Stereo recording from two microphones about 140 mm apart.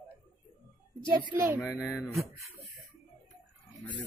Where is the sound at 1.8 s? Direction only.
15° left (ahead or behind).